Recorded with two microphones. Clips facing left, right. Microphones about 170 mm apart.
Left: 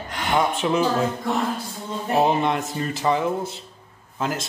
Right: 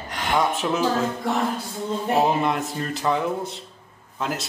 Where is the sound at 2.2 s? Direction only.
Centre (ahead or behind).